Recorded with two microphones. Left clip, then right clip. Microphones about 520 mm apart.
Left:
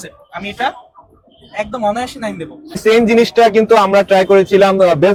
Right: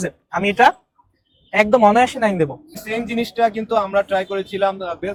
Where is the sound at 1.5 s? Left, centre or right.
Right.